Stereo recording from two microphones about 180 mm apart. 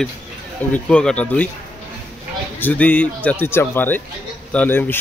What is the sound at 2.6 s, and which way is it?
A man's voice, 10° left (ahead or behind).